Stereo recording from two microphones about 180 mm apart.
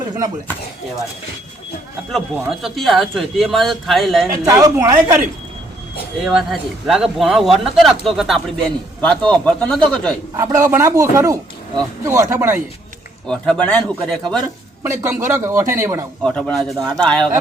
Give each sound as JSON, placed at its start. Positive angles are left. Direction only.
{"t": 2.1, "sound": "speech", "side_deg": 0}
{"t": 4.3, "sound": "speech", "side_deg": -20}
{"t": 6.2, "sound": "speech", "side_deg": 0}
{"t": 10.3, "sound": "a man's voice", "side_deg": -20}
{"t": 13.2, "sound": "speech", "side_deg": 5}
{"t": 14.8, "sound": "speech", "side_deg": -15}
{"t": 16.2, "sound": "speech", "side_deg": 5}